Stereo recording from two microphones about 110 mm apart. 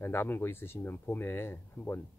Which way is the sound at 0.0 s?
20° left (ahead or behind).